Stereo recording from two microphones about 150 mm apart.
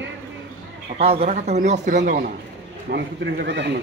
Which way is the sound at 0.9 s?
40° right (ahead or behind).